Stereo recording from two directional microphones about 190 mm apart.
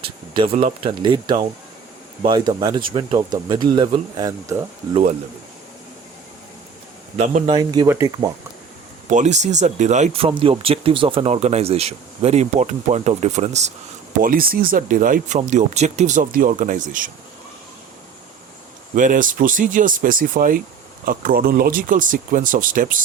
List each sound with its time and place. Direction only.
0.3 s speech: 30° right (ahead or behind)
7.2 s speech: 35° right (ahead or behind)
7.5 s speech: 20° right (ahead or behind)
9.0 s speech: 40° right (ahead or behind)
14.2 s speech: 50° right (ahead or behind)
18.9 s speech: 45° right (ahead or behind)